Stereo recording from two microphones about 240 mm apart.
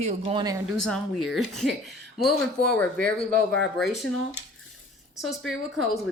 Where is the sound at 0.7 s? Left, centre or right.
Centre.